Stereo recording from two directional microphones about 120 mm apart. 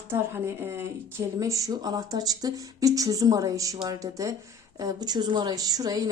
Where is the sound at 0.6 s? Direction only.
20° right (ahead or behind).